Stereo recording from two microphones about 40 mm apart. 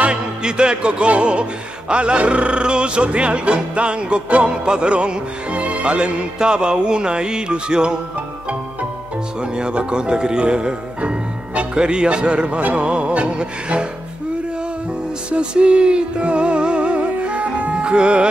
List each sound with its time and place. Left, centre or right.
0.0 s music: right
9.6 s speech: right
12.7 s music: right
15.3 s music: right